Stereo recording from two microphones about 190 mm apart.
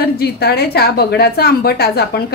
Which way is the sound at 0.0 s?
55° left (ahead or behind).